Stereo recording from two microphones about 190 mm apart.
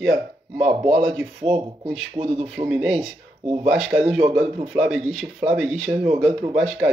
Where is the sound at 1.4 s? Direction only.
25° right (ahead or behind).